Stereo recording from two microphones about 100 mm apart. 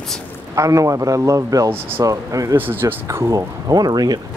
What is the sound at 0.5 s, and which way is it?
Speech, 35° right (ahead or behind).